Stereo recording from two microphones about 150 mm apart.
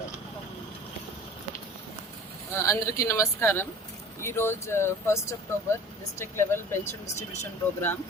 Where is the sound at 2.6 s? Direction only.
20° left (ahead or behind).